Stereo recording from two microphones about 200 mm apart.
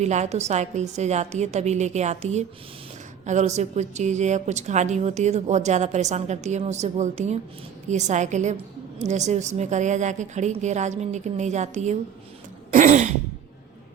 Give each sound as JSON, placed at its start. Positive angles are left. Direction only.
{"t": 0.0, "sound": "a woman's voice", "side_deg": -35}
{"t": 12.7, "sound": "throat clearing", "side_deg": -35}